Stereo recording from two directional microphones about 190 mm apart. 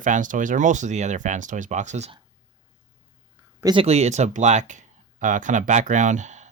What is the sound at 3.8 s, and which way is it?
Speech, 35° right (ahead or behind).